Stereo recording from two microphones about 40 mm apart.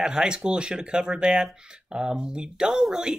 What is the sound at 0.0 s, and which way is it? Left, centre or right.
Speech, right.